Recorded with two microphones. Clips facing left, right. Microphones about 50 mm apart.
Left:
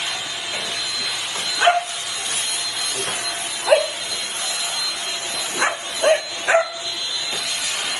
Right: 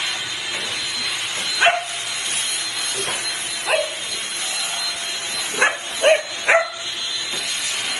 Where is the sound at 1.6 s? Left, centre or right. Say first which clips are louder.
Even; right.